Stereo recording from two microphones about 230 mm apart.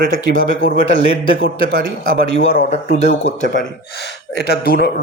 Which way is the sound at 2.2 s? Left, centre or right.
Left.